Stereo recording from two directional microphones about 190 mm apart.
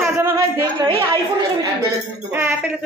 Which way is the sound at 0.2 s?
20° right (ahead or behind).